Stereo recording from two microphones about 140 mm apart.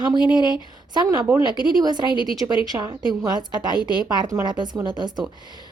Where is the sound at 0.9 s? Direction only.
30° right (ahead or behind).